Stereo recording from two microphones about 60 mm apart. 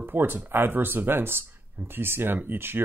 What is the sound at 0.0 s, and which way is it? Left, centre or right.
Speech, right.